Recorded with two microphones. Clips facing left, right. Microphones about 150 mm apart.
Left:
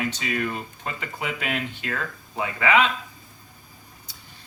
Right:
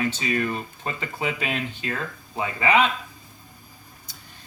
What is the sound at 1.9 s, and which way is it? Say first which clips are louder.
Speech: even; 25° right (ahead or behind).